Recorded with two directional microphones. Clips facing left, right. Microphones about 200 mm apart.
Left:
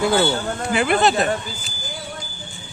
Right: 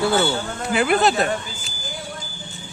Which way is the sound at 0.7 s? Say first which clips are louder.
Even; centre (ahead or behind).